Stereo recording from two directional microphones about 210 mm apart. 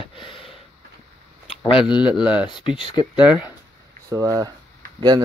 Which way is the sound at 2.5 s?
20° left (ahead or behind).